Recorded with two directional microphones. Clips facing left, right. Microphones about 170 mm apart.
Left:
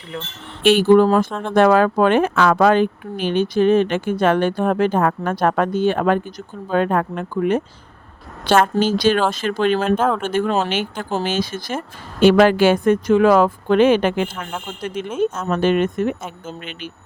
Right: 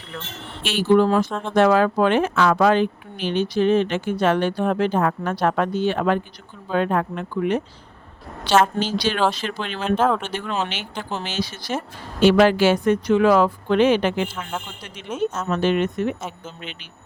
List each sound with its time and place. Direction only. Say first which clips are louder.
0.6 s speech: left 5 dB; 55° left (ahead or behind)
8.8 s speech: left 5 dB; 50° left (ahead or behind)